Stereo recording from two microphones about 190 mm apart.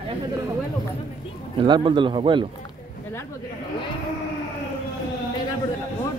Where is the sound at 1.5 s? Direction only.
25° right (ahead or behind).